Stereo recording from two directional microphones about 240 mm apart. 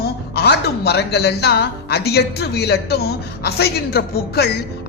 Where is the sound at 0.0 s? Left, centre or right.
Left.